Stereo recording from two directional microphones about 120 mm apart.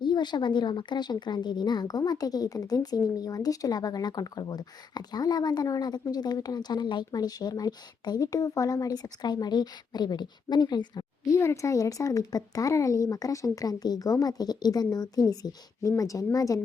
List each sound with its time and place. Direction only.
0.0 s speech: 40° left (ahead or behind)